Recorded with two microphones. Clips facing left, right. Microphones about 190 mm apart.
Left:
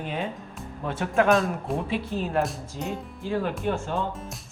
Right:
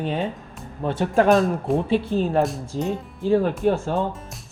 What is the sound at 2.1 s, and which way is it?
Speech, 30° right (ahead or behind).